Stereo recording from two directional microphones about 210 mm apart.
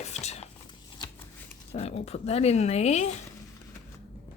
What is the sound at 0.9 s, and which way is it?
Shuffling cards, 15° left (ahead or behind).